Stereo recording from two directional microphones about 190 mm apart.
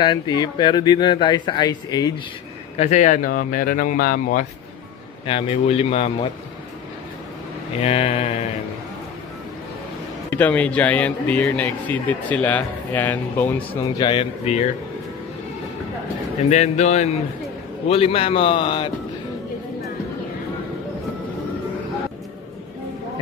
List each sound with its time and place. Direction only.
0.0 s speech: 20° left (ahead or behind)
2.8 s speech: 40° left (ahead or behind)
5.2 s speech: 30° left (ahead or behind)
7.8 s speech: 35° left (ahead or behind)
10.3 s a man's voice: 10° left (ahead or behind)
13.6 s speech: 25° left (ahead or behind)
16.4 s speech: 35° left (ahead or behind)